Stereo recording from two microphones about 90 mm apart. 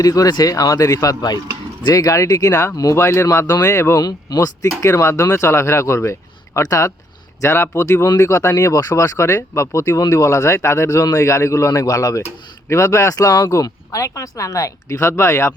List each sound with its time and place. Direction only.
0.0 s speech: 40° left (ahead or behind)
4.0 s speech: 45° left (ahead or behind)
8.0 s speech: 40° left (ahead or behind)